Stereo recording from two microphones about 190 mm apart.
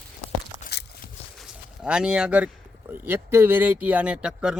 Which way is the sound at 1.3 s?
5° right (ahead or behind).